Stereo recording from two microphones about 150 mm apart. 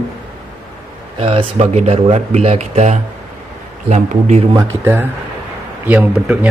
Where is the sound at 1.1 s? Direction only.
40° right (ahead or behind).